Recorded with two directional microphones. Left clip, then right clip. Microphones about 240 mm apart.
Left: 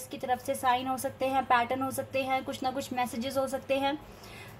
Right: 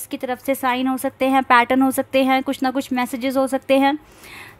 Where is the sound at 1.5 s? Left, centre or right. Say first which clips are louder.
Right 12 dB; right.